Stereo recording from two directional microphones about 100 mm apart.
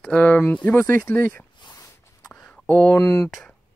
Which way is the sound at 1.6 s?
40° left (ahead or behind).